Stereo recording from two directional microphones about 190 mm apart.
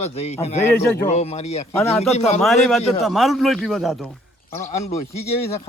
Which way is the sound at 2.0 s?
35° left (ahead or behind).